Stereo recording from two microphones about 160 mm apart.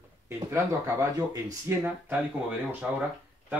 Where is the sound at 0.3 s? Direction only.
20° right (ahead or behind).